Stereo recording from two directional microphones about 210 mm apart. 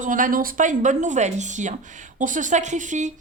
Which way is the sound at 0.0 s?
40° right (ahead or behind).